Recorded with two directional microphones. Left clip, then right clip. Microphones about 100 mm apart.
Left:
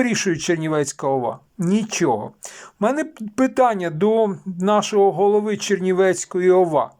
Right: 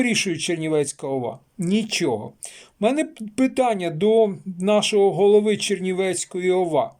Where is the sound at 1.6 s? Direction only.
45° right (ahead or behind).